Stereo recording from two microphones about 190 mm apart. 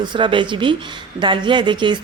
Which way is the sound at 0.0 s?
25° right (ahead or behind).